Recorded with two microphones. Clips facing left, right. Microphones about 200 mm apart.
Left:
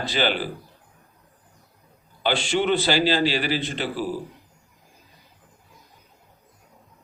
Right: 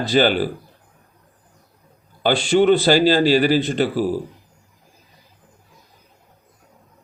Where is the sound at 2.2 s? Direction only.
40° right (ahead or behind).